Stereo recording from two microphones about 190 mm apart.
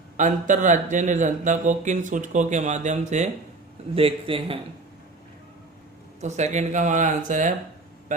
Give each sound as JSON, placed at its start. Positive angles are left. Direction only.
{"t": 0.2, "sound": "a man's voice", "side_deg": -40}
{"t": 6.2, "sound": "a man's voice", "side_deg": -40}